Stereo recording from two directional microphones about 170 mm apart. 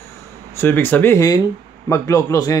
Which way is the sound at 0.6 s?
15° left (ahead or behind).